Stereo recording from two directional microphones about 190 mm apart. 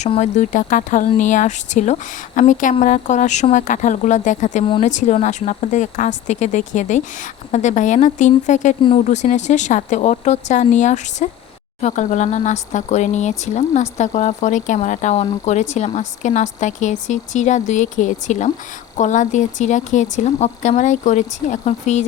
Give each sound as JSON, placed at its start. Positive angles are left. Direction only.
{"t": 0.0, "sound": "speech", "side_deg": 40}